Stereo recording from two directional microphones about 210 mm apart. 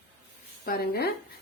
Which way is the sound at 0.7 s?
45° left (ahead or behind).